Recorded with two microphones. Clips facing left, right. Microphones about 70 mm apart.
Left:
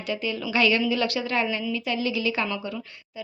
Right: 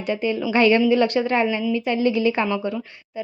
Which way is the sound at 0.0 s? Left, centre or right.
Right.